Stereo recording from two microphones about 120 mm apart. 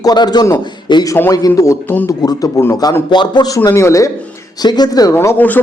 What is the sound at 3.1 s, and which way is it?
Speech, 40° left (ahead or behind).